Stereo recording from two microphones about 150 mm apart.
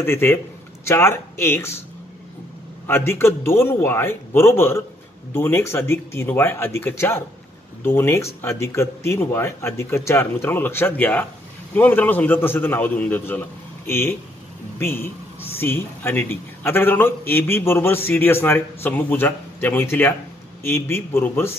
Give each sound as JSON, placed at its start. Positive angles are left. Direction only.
{"t": 0.0, "sound": "a man's voice", "side_deg": 15}
{"t": 2.9, "sound": "a man's voice", "side_deg": 15}